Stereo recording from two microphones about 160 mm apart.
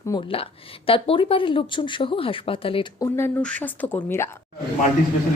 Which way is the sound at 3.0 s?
15° left (ahead or behind).